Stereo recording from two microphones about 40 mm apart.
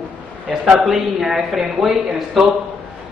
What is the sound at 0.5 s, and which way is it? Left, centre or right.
A man's voice, centre.